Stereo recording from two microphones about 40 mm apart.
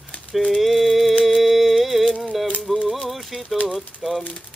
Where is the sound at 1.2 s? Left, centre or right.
Centre.